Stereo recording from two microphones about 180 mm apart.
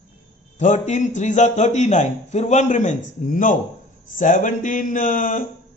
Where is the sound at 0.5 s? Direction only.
40° left (ahead or behind).